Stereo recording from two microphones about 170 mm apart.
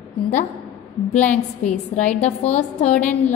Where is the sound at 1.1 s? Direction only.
10° left (ahead or behind).